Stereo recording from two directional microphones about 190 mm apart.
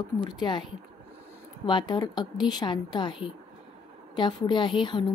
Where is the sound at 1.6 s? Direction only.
25° left (ahead or behind).